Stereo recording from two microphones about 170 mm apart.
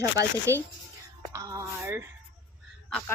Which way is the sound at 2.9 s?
5° left (ahead or behind).